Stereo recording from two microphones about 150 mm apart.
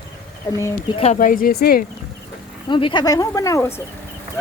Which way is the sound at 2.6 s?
35° left (ahead or behind).